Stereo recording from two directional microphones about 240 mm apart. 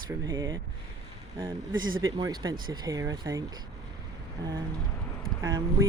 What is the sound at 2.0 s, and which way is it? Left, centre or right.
Speech, centre.